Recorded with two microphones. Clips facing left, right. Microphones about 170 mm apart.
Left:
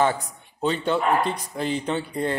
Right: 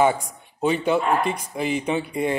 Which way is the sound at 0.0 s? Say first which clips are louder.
Right 3 dB; 10° right (ahead or behind).